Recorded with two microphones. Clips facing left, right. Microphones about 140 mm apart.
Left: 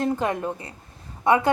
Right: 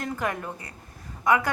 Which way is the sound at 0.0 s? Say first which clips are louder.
Left 6 dB; 25° left (ahead or behind).